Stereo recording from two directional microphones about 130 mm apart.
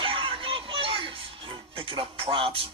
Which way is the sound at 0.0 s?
45° right (ahead or behind).